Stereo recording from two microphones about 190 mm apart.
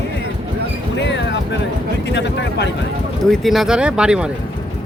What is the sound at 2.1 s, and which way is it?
Speech, 65° left (ahead or behind).